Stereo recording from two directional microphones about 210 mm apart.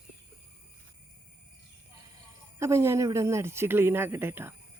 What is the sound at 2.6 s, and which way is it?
Speech, 15° right (ahead or behind).